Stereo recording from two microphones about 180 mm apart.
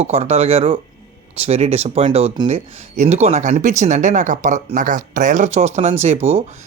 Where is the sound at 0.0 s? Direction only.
35° right (ahead or behind).